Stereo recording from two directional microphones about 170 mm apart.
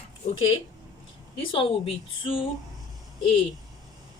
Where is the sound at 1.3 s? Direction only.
30° left (ahead or behind).